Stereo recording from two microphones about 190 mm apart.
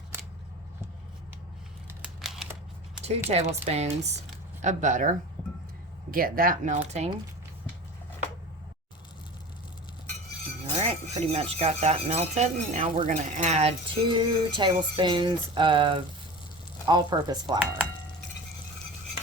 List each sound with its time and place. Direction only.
2.2 s scissors: centre (ahead or behind)
3.0 s speech: 35° right (ahead or behind)
10.8 s speech: 35° right (ahead or behind)